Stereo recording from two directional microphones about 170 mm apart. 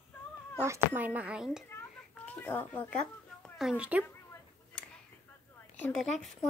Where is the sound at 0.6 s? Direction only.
15° right (ahead or behind).